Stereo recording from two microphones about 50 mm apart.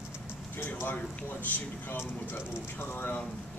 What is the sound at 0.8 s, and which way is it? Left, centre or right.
Speech, left.